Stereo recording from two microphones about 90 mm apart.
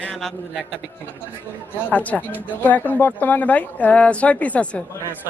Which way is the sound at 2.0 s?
15° left (ahead or behind).